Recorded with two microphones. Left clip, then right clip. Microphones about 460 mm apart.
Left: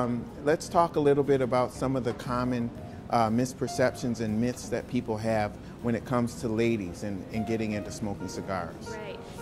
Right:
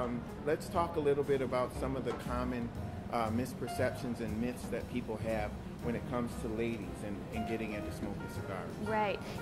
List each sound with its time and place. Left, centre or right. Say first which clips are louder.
0.5 s speech: left 9 dB; left